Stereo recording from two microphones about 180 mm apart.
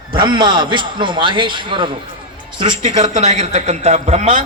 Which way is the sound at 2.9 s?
40° right (ahead or behind).